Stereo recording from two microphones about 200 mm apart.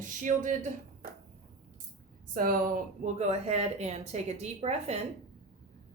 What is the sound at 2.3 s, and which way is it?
Speech, 45° right (ahead or behind).